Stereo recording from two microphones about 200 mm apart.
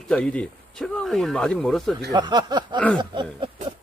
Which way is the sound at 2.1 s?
20° right (ahead or behind).